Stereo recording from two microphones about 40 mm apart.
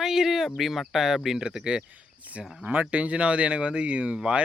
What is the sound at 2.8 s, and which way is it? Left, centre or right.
Speech, right.